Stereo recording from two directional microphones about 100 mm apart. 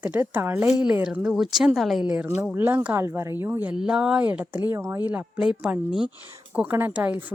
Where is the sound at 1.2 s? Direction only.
5° right (ahead or behind).